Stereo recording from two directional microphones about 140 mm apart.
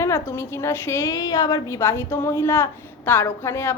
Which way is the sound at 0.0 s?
20° left (ahead or behind).